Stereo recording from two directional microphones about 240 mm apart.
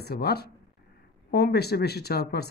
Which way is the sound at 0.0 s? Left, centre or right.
Left.